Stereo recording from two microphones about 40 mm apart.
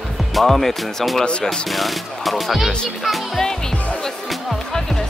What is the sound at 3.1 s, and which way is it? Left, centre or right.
Speech, centre.